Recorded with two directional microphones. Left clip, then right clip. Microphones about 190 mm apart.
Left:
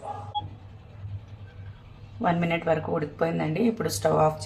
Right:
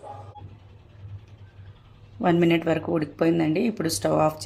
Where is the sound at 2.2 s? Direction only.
55° right (ahead or behind).